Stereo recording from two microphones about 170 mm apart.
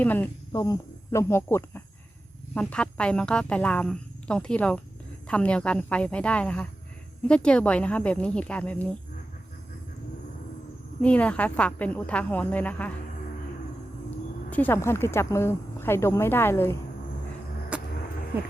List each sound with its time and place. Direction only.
0.0 s a woman's voice: 10° left (ahead or behind)
11.0 s speech: 5° left (ahead or behind)
14.5 s speech: 10° left (ahead or behind)
17.7 s vehicle: 5° right (ahead or behind)